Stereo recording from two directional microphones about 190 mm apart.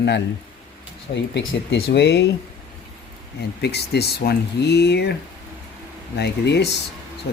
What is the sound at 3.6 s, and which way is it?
Speech, 60° left (ahead or behind).